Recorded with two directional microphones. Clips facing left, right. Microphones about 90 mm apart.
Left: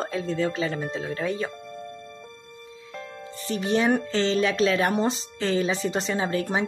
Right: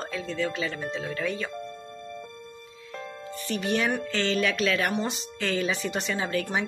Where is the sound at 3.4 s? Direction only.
30° left (ahead or behind).